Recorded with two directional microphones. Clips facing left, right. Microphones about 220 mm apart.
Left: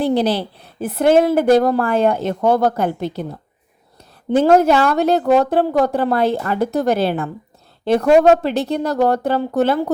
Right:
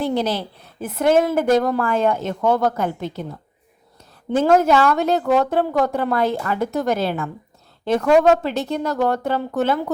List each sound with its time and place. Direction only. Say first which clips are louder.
0.0 s a woman's voice: left 4 dB; 35° left (ahead or behind)
4.3 s a woman's voice: left 3 dB; 35° left (ahead or behind)